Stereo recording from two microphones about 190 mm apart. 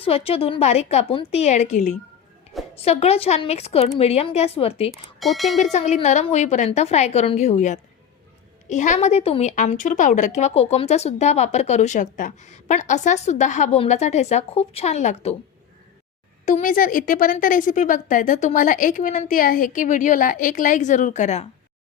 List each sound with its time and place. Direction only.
0.0 s a woman's voice: 30° left (ahead or behind)
4.9 s speech: centre (ahead or behind)
5.7 s a woman's voice: 35° left (ahead or behind)
16.5 s a woman's voice: 45° left (ahead or behind)